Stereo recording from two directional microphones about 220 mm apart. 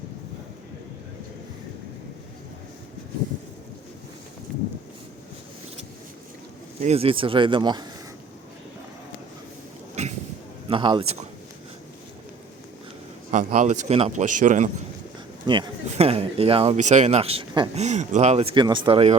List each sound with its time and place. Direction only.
6.8 s speech: 25° right (ahead or behind)
9.9 s a sound: 30° right (ahead or behind)
10.7 s speech: 20° right (ahead or behind)
13.3 s speech: 35° right (ahead or behind)
15.4 s speech: 20° right (ahead or behind)